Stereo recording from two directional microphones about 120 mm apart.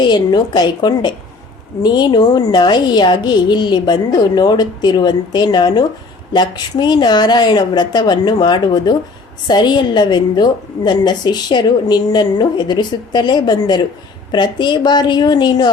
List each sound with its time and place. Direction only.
0.0 s a woman's voice: 35° left (ahead or behind)